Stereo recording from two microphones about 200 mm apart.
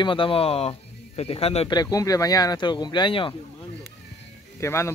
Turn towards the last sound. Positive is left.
turn(degrees=15)  # may be behind; listen again after turning